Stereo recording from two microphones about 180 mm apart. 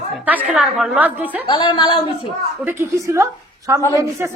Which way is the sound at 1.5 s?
25° left (ahead or behind).